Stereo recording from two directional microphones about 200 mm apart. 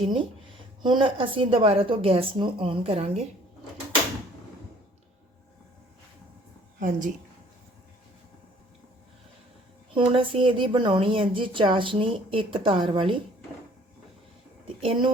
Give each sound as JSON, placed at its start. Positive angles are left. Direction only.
{"t": 0.0, "sound": "speech", "side_deg": -25}
{"t": 6.7, "sound": "a woman's voice", "side_deg": -40}
{"t": 9.9, "sound": "speech", "side_deg": -25}
{"t": 14.8, "sound": "speech", "side_deg": -25}